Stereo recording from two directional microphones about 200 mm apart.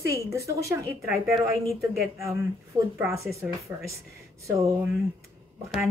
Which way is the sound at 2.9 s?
15° right (ahead or behind).